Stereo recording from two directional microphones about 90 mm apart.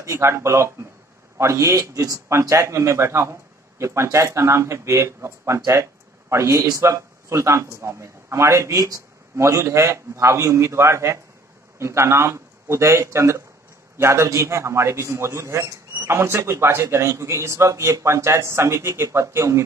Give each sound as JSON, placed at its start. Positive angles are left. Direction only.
{"t": 0.0, "sound": "a man's voice", "side_deg": -35}